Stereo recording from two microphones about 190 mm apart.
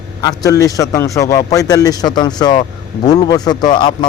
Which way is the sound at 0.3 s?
20° left (ahead or behind).